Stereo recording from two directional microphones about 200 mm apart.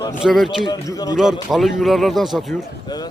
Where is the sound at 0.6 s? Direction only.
20° left (ahead or behind).